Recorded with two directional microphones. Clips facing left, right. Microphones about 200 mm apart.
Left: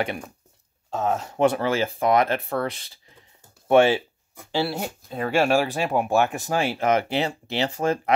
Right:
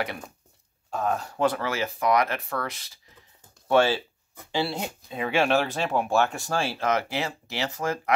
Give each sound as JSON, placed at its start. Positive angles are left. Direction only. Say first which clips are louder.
{"t": 0.8, "sound": "speech", "louder": "left 2 dB", "side_deg": 25}
{"t": 4.7, "sound": "speech", "louder": "left 2 dB", "side_deg": 5}